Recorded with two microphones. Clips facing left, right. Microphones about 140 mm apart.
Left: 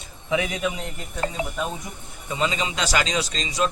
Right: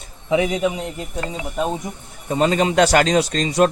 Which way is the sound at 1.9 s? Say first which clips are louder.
Right 7 dB; 25° right (ahead or behind).